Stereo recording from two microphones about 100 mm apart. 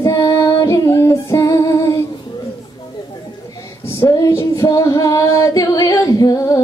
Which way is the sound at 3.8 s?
30° left (ahead or behind).